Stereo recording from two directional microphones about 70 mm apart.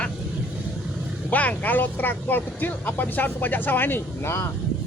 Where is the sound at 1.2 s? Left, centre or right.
Left.